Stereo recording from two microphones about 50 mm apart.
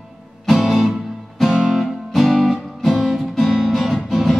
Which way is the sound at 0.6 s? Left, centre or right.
Centre.